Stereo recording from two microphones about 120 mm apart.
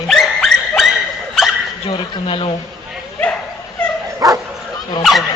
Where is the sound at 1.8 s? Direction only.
50° left (ahead or behind).